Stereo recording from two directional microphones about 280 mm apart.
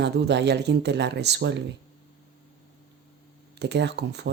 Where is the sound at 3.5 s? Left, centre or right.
Right.